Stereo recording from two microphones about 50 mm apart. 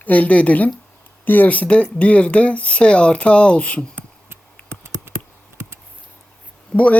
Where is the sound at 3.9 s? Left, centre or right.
Right.